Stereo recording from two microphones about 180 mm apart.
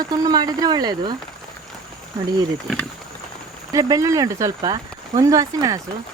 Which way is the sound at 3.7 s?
20° right (ahead or behind).